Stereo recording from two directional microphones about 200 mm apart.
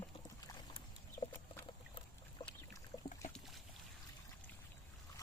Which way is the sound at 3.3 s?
Centre (ahead or behind).